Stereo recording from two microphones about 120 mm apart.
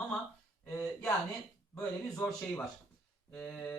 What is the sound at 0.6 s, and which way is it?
Speech, 15° left (ahead or behind).